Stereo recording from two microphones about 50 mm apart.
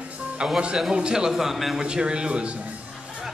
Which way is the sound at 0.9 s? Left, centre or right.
Centre.